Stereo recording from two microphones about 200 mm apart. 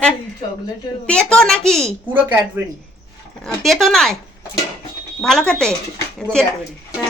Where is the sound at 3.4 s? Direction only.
Centre (ahead or behind).